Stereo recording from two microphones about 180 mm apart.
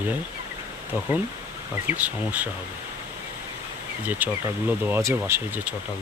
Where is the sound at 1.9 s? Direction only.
10° right (ahead or behind).